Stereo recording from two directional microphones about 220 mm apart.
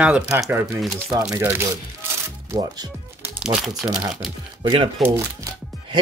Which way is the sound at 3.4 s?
5° right (ahead or behind).